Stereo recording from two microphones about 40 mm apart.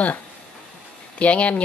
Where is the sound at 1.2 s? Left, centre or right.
Left.